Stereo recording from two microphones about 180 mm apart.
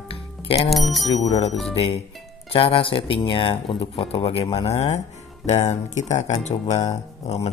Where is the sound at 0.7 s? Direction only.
Centre (ahead or behind).